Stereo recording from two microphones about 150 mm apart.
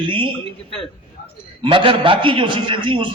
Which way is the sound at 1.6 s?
35° right (ahead or behind).